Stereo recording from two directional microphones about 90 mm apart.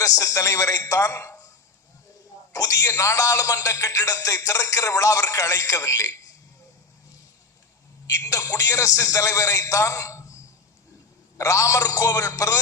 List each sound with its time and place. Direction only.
0.0 s speech: 35° left (ahead or behind)
2.5 s speech: 40° left (ahead or behind)
8.0 s speech: 35° left (ahead or behind)
11.3 s speech: 35° left (ahead or behind)